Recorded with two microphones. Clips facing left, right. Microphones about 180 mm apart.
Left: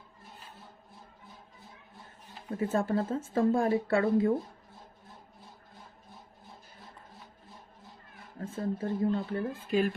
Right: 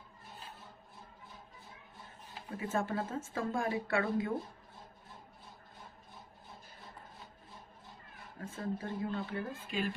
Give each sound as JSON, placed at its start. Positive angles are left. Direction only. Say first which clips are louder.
{"t": 2.6, "sound": "speech", "louder": "left 6 dB", "side_deg": 40}
{"t": 8.4, "sound": "speech", "louder": "left 6 dB", "side_deg": 35}